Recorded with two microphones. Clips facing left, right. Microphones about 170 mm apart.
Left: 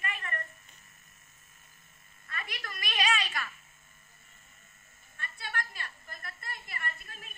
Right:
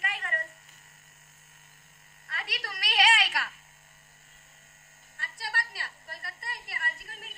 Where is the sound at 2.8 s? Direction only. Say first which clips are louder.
Right 5 dB; 80° right.